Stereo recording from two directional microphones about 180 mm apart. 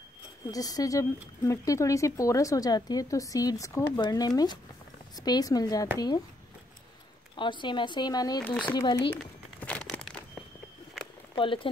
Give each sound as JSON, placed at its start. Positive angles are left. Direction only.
{"t": 0.5, "sound": "speech", "side_deg": 20}
{"t": 7.3, "sound": "speech", "side_deg": 25}
{"t": 8.5, "sound": "speech", "side_deg": 5}
{"t": 8.7, "sound": "speech", "side_deg": 25}
{"t": 9.1, "sound": "crumpling", "side_deg": 10}
{"t": 11.3, "sound": "speech", "side_deg": 30}